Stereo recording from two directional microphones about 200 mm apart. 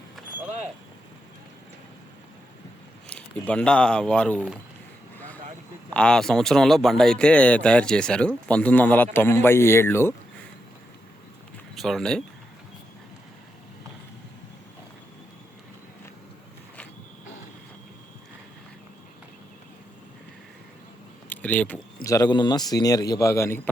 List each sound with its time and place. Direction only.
0.2 s a sound: centre (ahead or behind)
3.1 s speech: 5° left (ahead or behind)
5.1 s vehicle: 10° left (ahead or behind)
5.9 s speech: 5° left (ahead or behind)
11.7 s speech: centre (ahead or behind)
21.2 s a sound: 5° left (ahead or behind)
22.0 s speech: 15° left (ahead or behind)